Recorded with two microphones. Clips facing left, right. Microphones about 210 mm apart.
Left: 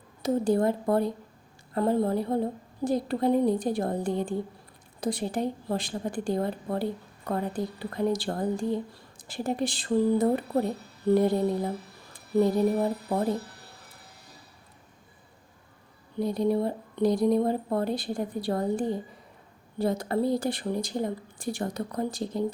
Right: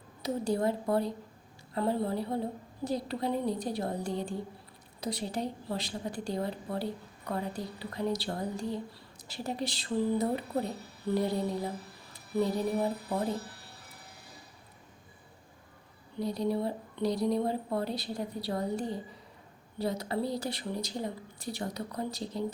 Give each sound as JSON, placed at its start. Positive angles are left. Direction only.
{"t": 0.2, "sound": "speech", "side_deg": 50}
{"t": 16.2, "sound": "speech", "side_deg": 50}